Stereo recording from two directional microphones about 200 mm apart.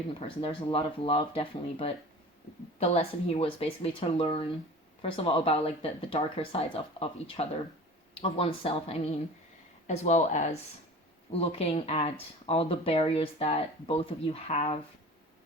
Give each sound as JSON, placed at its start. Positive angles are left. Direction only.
{"t": 0.2, "sound": "speech", "side_deg": 30}